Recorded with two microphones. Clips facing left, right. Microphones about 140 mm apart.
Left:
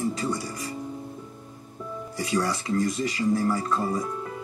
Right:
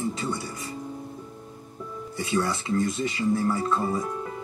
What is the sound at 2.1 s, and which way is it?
Speech, 25° right (ahead or behind).